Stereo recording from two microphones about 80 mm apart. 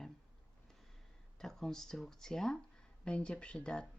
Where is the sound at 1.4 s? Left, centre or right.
Centre.